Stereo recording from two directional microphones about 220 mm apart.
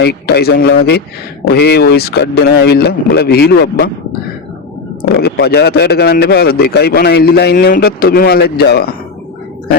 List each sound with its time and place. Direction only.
0.0 s a man's voice: 45° left (ahead or behind)
5.2 s a man's voice: 45° left (ahead or behind)